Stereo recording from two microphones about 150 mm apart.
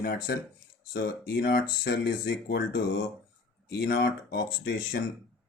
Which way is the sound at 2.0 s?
90° left.